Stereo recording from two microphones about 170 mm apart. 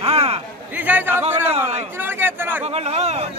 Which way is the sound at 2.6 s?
40° right (ahead or behind).